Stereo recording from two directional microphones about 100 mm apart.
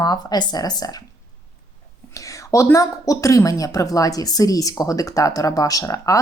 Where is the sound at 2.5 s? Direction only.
30° left (ahead or behind).